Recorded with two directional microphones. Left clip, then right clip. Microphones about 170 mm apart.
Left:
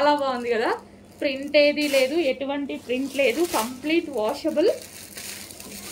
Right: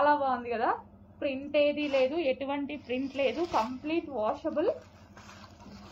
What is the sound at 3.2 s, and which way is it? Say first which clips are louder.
A woman's voice: left 6 dB; 35° left (ahead or behind).